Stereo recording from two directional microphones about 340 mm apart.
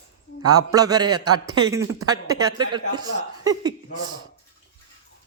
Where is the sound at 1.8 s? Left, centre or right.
Right.